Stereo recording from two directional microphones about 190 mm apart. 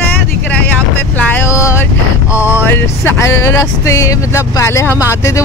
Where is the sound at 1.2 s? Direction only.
10° left (ahead or behind).